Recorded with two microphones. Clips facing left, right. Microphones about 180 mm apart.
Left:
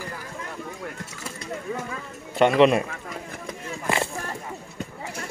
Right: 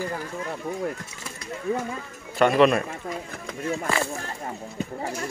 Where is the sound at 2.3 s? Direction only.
25° left (ahead or behind).